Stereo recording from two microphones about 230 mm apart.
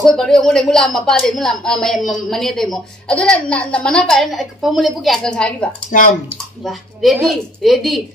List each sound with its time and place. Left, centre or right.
0.0 s speech: centre
5.9 s speech: left
6.6 s speech: centre